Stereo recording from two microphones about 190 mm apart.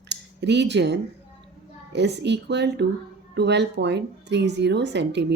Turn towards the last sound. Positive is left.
turn(degrees=-65)  # may be behind; listen again after turning